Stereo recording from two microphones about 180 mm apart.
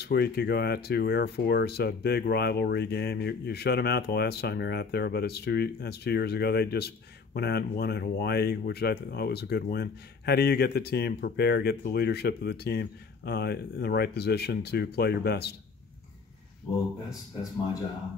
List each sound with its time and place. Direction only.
0.0 s speech: 65° left (ahead or behind)